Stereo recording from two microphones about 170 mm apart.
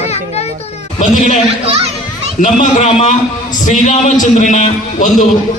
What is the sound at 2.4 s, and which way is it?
A man's voice, 45° left (ahead or behind).